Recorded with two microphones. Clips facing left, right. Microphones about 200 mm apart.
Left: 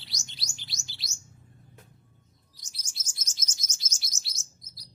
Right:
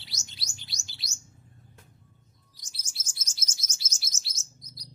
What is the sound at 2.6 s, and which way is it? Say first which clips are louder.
Chirp: even; centre (ahead or behind).